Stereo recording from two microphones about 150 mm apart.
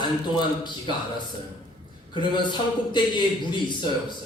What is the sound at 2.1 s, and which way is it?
A man's voice, 30° left (ahead or behind).